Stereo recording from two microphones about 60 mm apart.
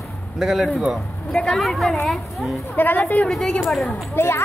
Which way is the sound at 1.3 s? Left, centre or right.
Centre.